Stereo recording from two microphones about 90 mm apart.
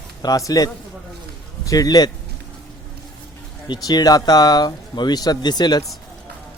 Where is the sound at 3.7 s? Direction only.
50° left (ahead or behind).